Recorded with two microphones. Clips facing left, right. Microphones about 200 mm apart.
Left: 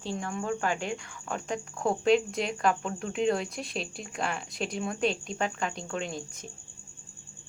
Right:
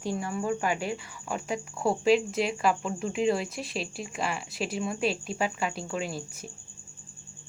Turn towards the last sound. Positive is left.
turn(degrees=-5)  # may be behind; listen again after turning